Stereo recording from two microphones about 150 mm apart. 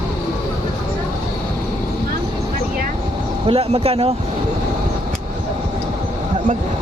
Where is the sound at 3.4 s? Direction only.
40° right (ahead or behind).